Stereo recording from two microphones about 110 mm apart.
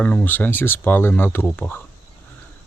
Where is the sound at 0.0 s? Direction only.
15° left (ahead or behind).